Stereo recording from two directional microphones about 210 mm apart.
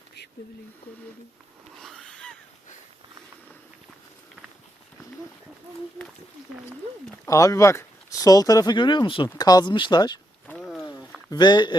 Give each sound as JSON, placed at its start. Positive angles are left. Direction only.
{"t": 1.8, "sound": "wheeze", "side_deg": 0}
{"t": 7.3, "sound": "speech", "side_deg": 15}
{"t": 10.4, "sound": "wild animals", "side_deg": 5}
{"t": 11.3, "sound": "speech", "side_deg": 20}